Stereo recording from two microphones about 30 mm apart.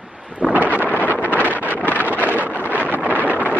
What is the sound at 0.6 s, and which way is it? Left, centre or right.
Wind noise, left.